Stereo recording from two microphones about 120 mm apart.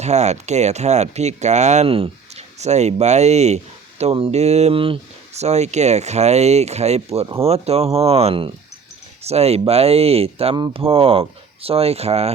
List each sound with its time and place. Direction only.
0.0 s speech: 70° right (ahead or behind)
1.9 s speech: 60° right (ahead or behind)
5.4 s speech: 65° right (ahead or behind)
10.5 s speech: 45° right (ahead or behind)